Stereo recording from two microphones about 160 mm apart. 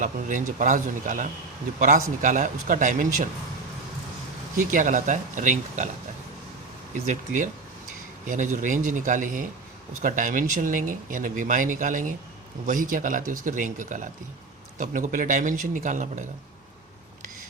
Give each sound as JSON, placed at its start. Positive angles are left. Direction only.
{"t": 0.0, "sound": "speech", "side_deg": -55}
{"t": 4.5, "sound": "speech", "side_deg": -55}
{"t": 7.1, "sound": "speech", "side_deg": -50}